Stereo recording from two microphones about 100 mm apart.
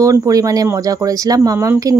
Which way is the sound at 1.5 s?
25° right (ahead or behind).